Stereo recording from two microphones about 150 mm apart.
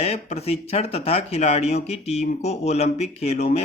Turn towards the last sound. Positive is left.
turn(degrees=45)  # may be behind; listen again after turning